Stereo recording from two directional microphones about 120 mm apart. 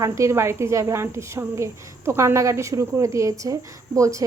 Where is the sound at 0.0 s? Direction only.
25° right (ahead or behind).